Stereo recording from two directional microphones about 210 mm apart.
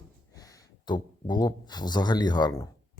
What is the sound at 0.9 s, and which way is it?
Speech, 20° left (ahead or behind).